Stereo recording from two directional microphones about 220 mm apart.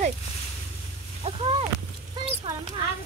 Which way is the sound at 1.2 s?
25° right (ahead or behind).